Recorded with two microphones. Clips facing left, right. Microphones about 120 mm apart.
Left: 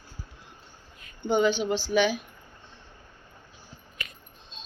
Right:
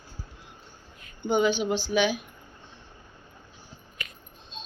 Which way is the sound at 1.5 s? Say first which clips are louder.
Even; 30° left (ahead or behind).